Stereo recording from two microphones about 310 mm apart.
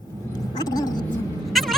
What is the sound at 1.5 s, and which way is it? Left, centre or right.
Cat, centre.